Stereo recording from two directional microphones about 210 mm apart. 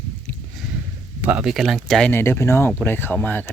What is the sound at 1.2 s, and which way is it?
Speech, 5° right (ahead or behind).